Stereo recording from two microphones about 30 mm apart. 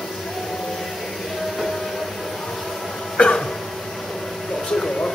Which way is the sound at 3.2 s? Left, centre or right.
Left.